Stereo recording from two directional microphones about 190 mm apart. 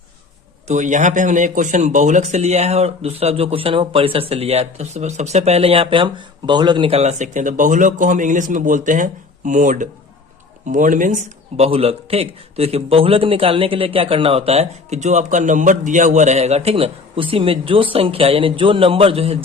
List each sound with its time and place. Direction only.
0.7 s speech: 40° right (ahead or behind)